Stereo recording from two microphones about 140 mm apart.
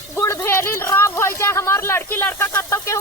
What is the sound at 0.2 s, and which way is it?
Speech, 20° left (ahead or behind).